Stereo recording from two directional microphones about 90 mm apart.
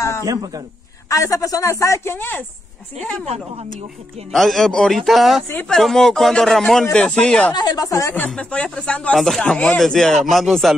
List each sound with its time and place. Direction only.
0.2 s speech: 45° right (ahead or behind)
1.0 s speech: 35° left (ahead or behind)
2.1 s speech: 20° left (ahead or behind)
4.3 s speech: centre (ahead or behind)
7.5 s speech: 45° left (ahead or behind)
8.4 s speech: 15° left (ahead or behind)